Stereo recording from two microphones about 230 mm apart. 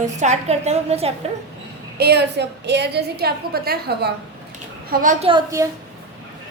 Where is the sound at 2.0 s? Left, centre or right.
Right.